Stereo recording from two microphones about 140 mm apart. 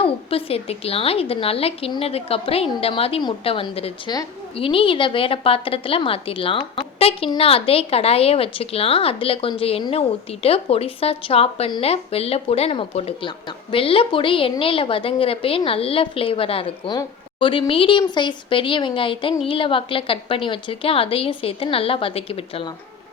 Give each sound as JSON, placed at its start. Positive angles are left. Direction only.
{"t": 0.0, "sound": "a woman's voice", "side_deg": 40}